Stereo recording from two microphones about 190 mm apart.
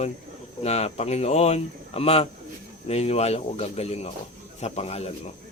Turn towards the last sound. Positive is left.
turn(degrees=35)  # may be behind; listen again after turning